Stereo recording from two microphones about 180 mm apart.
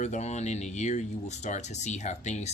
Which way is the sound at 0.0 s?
40° left (ahead or behind).